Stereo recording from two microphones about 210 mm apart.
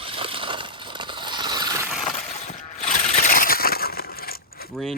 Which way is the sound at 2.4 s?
40° left (ahead or behind).